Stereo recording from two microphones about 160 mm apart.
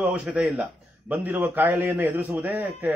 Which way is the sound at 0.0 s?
10° right (ahead or behind).